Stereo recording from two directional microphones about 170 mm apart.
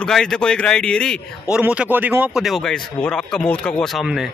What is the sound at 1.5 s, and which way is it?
Speech, 5° right (ahead or behind).